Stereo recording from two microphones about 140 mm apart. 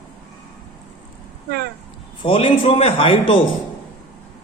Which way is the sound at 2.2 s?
45° left (ahead or behind).